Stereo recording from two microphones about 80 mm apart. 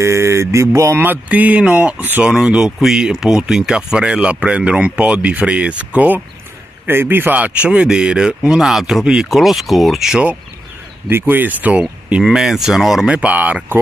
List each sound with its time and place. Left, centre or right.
0.0 s speech: right
1.0 s speech: right
2.2 s speech: centre
11.1 s speech: right
12.2 s speech: centre
13.1 s speech: centre